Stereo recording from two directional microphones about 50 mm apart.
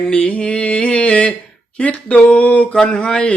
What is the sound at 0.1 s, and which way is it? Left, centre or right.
Mantra, left.